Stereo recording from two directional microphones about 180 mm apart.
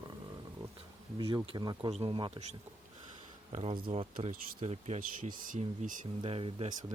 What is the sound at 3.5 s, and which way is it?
Speech, 35° right (ahead or behind).